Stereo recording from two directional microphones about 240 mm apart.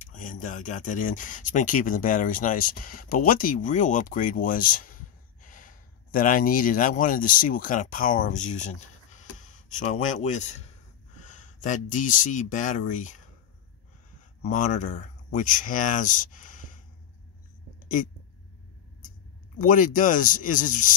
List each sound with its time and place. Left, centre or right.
0.0 s speech: left
14.4 s speech: left
17.7 s a sound: left
19.6 s speech: left